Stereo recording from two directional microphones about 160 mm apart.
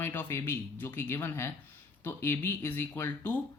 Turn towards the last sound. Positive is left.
turn(degrees=10)  # may be behind; listen again after turning